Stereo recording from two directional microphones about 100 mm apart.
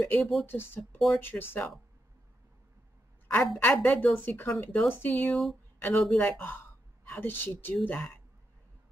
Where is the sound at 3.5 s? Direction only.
15° left (ahead or behind).